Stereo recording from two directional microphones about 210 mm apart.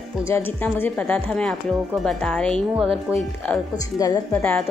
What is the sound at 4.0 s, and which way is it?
Speech, 15° left (ahead or behind).